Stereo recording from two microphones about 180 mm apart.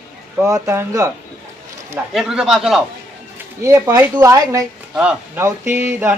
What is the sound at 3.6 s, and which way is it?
Speech, 15° right (ahead or behind).